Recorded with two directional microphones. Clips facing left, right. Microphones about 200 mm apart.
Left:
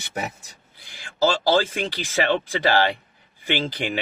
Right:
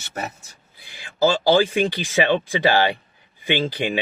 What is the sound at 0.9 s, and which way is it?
Speech, 15° right (ahead or behind).